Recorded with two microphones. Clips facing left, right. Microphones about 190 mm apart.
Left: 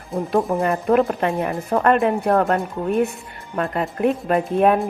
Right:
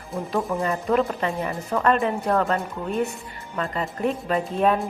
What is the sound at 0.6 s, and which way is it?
A woman's voice, 55° left (ahead or behind).